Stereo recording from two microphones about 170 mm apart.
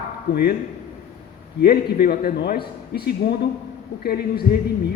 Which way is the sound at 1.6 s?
60° left (ahead or behind).